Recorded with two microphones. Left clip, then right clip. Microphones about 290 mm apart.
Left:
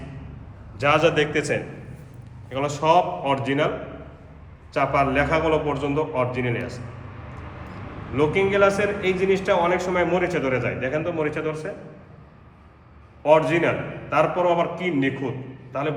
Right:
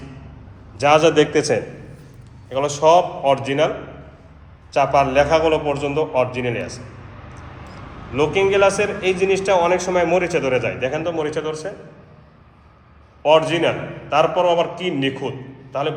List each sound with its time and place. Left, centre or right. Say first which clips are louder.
0.8 s a man's voice: right 5 dB; centre
4.7 s a man's voice: right 5 dB; centre
8.1 s a man's voice: right 4 dB; centre
13.2 s a man's voice: right 3 dB; centre